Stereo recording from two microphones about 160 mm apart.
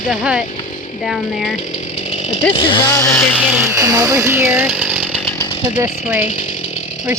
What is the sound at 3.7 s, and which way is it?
Speech, 20° right (ahead or behind).